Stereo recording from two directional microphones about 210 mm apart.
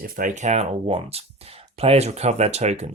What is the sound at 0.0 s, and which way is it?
Speech, 40° right (ahead or behind).